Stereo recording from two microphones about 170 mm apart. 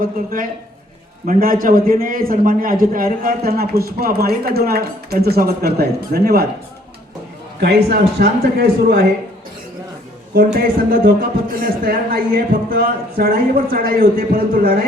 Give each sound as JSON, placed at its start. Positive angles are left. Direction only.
{"t": 0.0, "sound": "a man's voice", "side_deg": -55}
{"t": 7.9, "sound": "a man's voice", "side_deg": -70}
{"t": 10.3, "sound": "a man's voice", "side_deg": -60}